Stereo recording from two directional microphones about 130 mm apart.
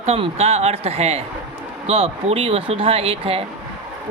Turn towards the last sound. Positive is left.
turn(degrees=-50)  # may be behind; listen again after turning